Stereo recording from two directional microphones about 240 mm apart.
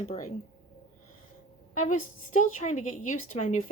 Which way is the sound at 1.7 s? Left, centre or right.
Left.